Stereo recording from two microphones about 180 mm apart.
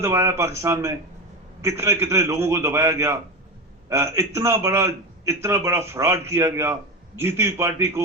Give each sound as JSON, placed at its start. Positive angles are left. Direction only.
{"t": 0.0, "sound": "a man's voice", "side_deg": -15}